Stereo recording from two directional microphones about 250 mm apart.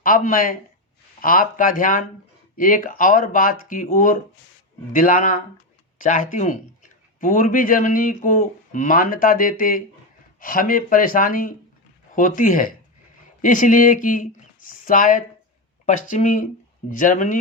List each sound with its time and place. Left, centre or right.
0.0 s speech: left